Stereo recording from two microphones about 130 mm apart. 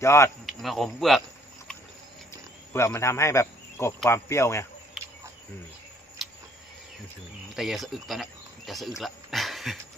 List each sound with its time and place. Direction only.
0.0 s speech: 20° left (ahead or behind)
0.4 s speech: centre (ahead or behind)
2.3 s cricket: 20° left (ahead or behind)
4.1 s speech: 20° left (ahead or behind)
5.0 s cricket: centre (ahead or behind)
7.5 s speech: centre (ahead or behind)
9.0 s a sound: centre (ahead or behind)